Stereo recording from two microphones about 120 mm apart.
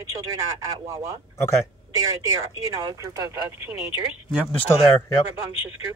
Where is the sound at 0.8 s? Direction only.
25° right (ahead or behind).